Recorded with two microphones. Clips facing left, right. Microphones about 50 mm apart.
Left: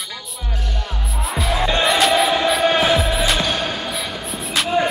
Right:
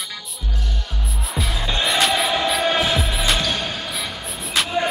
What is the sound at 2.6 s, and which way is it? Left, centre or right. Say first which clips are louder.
Music: left 6 dB; left.